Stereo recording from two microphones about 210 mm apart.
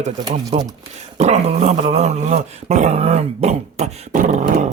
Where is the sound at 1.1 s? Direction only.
30° right (ahead or behind).